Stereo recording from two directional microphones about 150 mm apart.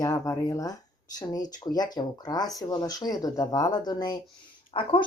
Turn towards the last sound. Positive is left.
turn(degrees=40)  # may be behind; listen again after turning